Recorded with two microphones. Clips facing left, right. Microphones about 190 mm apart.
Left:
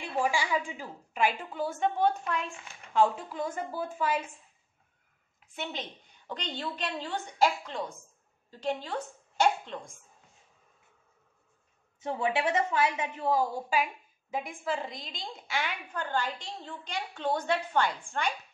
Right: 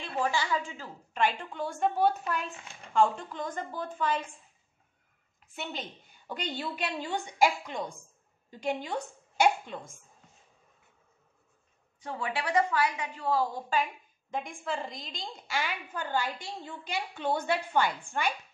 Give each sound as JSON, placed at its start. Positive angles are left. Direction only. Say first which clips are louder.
{"t": 0.0, "sound": "a woman's voice", "louder": "left 1 dB", "side_deg": 10}
{"t": 5.5, "sound": "a woman's voice", "louder": "left 1 dB", "side_deg": 0}
{"t": 12.0, "sound": "a woman's voice", "louder": "left 5 dB", "side_deg": 20}